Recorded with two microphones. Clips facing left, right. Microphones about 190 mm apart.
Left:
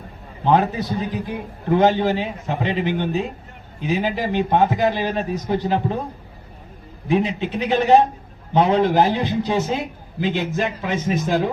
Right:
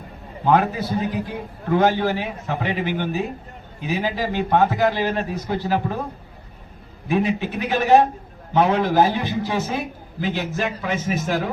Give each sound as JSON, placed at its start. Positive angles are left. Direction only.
{"t": 0.4, "sound": "a man's voice", "side_deg": 20}
{"t": 7.1, "sound": "a man's voice", "side_deg": 20}